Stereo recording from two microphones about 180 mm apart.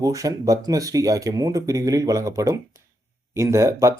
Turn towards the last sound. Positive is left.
turn(degrees=-15)  # may be behind; listen again after turning